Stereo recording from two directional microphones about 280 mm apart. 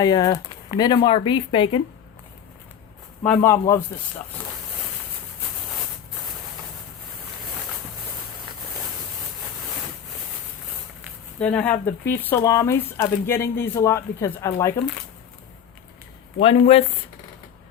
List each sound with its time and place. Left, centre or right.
0.0 s speech: centre
3.3 s speech: centre
11.0 s a sound: centre
12.0 s speech: centre
16.4 s speech: left